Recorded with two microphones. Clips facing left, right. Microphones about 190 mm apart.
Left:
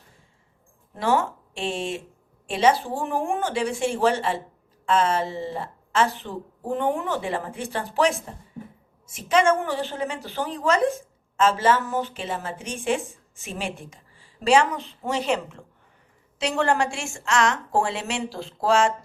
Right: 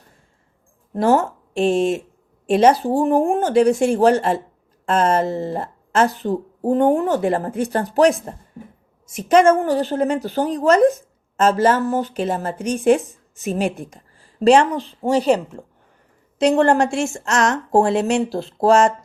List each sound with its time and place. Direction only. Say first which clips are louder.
0.9 s a woman's voice: right 6 dB; 45° right (ahead or behind)